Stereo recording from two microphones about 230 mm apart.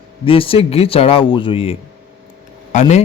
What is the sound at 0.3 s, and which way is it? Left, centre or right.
A man's voice, left.